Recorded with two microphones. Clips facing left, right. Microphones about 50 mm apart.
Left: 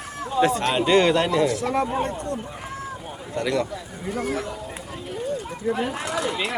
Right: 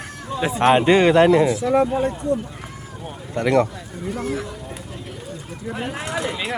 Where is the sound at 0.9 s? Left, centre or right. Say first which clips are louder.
Right 3 dB; centre.